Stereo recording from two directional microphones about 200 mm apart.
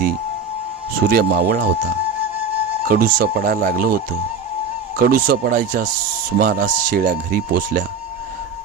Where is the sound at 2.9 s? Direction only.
45° right (ahead or behind).